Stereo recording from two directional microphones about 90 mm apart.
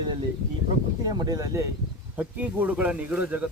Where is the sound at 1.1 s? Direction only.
45° right (ahead or behind).